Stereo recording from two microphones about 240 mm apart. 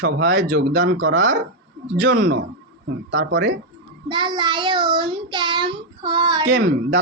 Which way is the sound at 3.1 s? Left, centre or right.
Right.